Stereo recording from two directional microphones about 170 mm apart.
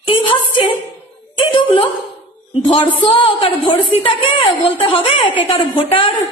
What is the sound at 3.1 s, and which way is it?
A woman's voice, 30° left (ahead or behind).